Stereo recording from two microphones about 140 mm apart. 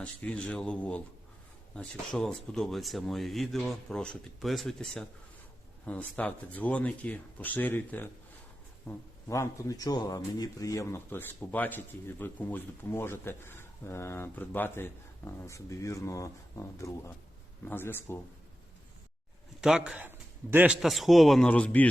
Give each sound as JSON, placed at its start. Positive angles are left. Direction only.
{"t": 0.0, "sound": "speech", "side_deg": 10}
{"t": 19.6, "sound": "a man's voice", "side_deg": -5}
{"t": 20.8, "sound": "speech", "side_deg": 0}